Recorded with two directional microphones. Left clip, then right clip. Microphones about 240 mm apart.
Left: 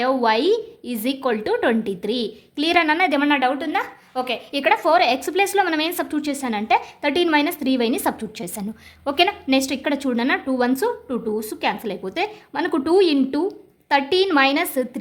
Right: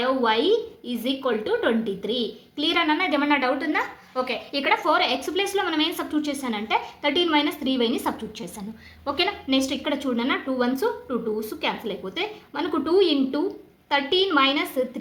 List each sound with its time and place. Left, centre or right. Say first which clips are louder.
0.0 s a woman's voice: left 3 dB; left